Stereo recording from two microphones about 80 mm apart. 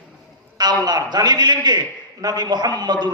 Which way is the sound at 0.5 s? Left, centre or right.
Right.